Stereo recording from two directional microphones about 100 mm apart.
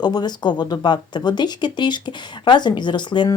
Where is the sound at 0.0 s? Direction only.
45° left (ahead or behind).